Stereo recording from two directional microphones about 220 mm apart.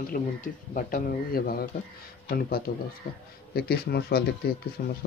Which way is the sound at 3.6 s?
45° left (ahead or behind).